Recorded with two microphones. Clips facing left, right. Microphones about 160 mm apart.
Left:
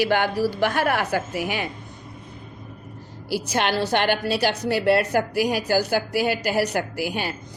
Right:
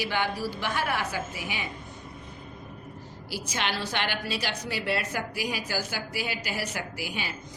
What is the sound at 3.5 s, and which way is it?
A woman's voice, 60° left (ahead or behind).